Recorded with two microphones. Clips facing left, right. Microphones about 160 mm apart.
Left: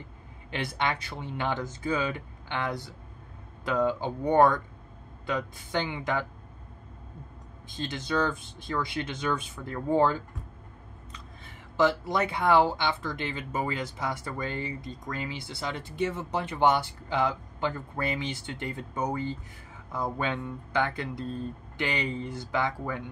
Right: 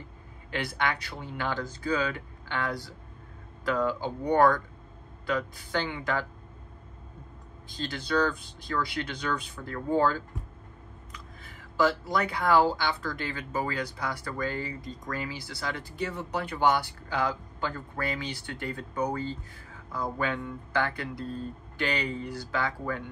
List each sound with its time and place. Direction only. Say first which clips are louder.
0.5 s speech: even; 25° left (ahead or behind)
7.7 s speech: right 1 dB; 20° left (ahead or behind)